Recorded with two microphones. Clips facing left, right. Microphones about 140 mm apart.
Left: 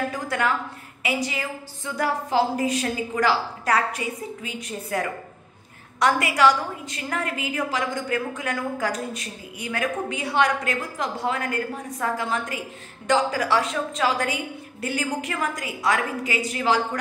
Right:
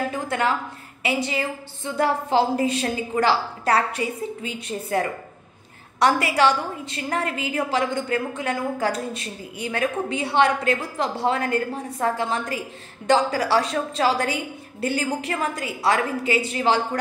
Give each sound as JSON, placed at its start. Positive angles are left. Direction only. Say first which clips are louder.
{"t": 0.1, "sound": "a woman's voice", "louder": "right 1 dB", "side_deg": -25}